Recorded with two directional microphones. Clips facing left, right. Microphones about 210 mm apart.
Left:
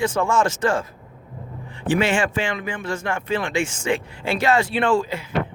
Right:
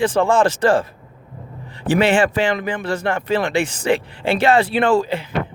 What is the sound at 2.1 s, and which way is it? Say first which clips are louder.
Speech: right 5 dB; 35° right (ahead or behind).